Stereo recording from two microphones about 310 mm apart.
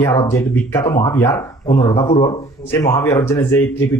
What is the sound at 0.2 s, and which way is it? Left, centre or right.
Speech, centre.